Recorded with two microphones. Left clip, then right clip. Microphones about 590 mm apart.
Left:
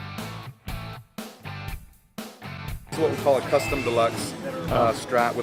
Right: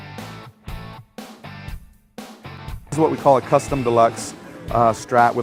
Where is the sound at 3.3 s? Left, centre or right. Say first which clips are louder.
Right 6 dB; right.